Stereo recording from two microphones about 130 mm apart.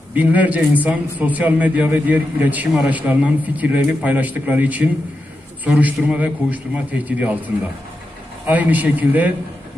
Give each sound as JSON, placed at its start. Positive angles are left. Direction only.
{"t": 0.1, "sound": "a man's voice", "side_deg": -10}
{"t": 8.5, "sound": "a man's voice", "side_deg": -10}